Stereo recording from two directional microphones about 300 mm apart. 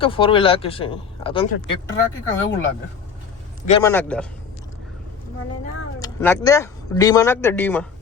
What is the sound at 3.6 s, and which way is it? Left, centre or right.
Speech, centre.